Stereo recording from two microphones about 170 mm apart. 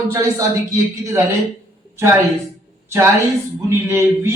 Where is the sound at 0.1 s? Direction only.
20° right (ahead or behind).